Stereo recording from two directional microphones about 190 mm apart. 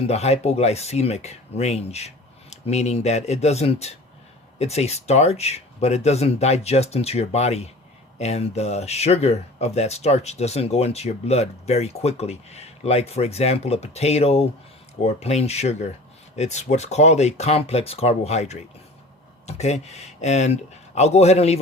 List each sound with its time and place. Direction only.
0.0 s speech: 35° left (ahead or behind)